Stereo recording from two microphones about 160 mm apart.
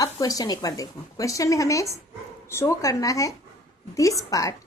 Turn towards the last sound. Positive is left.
turn(degrees=20)  # may be behind; listen again after turning